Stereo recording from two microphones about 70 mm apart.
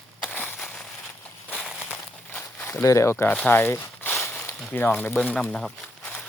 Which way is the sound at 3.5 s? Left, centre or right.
Left.